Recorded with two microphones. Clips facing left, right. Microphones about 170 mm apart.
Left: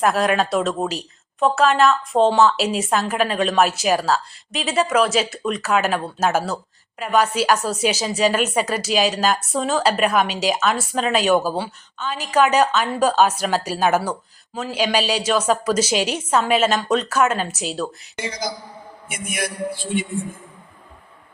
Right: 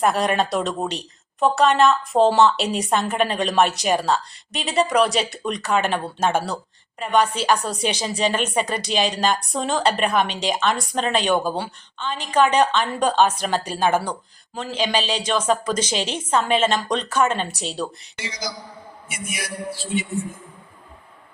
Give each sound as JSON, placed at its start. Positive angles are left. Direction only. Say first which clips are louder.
{"t": 0.0, "sound": "a woman's voice", "louder": "left 1 dB", "side_deg": 0}
{"t": 18.2, "sound": "a man's voice", "louder": "left 4 dB", "side_deg": 50}